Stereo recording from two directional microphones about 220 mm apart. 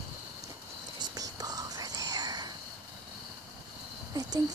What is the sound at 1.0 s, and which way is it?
Whispering, 15° right (ahead or behind).